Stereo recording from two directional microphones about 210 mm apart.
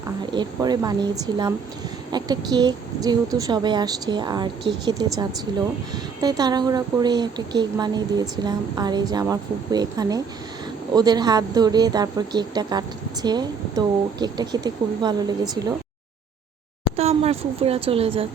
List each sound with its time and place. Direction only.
0.3 s a woman's voice: 20° right (ahead or behind)
17.0 s a woman's voice: 30° right (ahead or behind)